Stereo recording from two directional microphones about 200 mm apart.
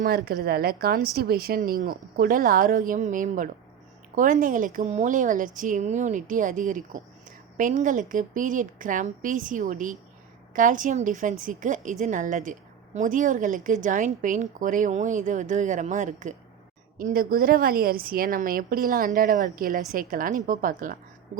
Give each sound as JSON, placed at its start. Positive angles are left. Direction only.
{"t": 0.3, "sound": "a woman's voice", "side_deg": -50}